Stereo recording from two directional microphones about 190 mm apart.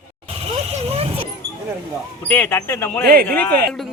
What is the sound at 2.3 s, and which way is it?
Speech, 10° left (ahead or behind).